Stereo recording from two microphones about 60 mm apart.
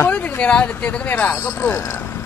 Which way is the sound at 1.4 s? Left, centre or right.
Left.